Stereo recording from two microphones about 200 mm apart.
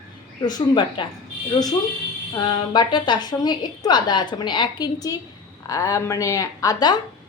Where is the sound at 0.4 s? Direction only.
20° left (ahead or behind).